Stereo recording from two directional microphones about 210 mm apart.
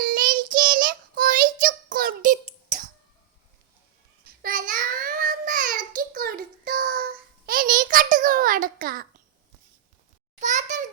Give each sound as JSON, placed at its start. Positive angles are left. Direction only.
{"t": 0.0, "sound": "child singing", "side_deg": -45}
{"t": 4.4, "sound": "child singing", "side_deg": -40}
{"t": 10.4, "sound": "a sound", "side_deg": -35}